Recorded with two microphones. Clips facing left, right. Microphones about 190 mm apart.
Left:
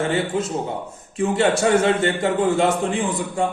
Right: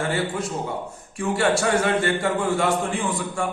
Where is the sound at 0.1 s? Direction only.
20° left (ahead or behind).